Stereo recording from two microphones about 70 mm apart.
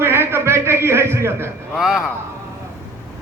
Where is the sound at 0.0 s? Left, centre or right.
Right.